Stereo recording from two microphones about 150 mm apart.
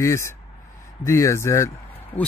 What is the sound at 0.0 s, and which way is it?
A man's voice, 20° left (ahead or behind).